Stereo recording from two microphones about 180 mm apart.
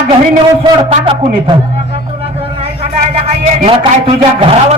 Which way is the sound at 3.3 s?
35° right (ahead or behind).